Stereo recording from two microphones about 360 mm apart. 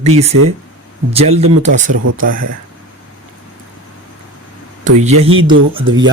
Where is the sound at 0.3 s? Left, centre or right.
Right.